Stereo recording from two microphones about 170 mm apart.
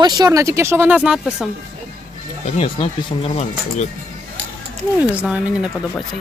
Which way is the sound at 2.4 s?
35° left (ahead or behind).